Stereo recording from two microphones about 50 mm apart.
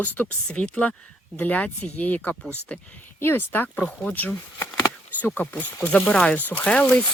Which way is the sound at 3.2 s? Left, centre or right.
Left.